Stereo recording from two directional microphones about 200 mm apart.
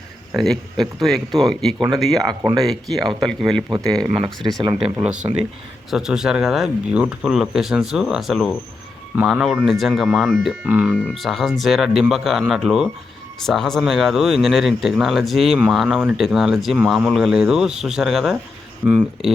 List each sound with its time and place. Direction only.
0.3 s speech: centre (ahead or behind)
2.2 s speech: 20° right (ahead or behind)
2.6 s speech: centre (ahead or behind)
4.6 s speech: 25° right (ahead or behind)
4.9 s speech: 5° right (ahead or behind)